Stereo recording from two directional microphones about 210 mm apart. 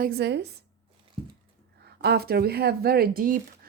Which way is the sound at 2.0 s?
50° right (ahead or behind).